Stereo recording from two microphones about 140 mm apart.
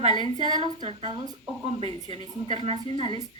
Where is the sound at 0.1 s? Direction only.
35° right (ahead or behind).